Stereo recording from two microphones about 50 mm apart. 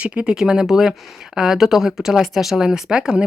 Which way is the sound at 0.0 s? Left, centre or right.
Right.